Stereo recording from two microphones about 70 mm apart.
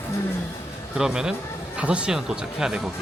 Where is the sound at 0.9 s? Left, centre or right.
Centre.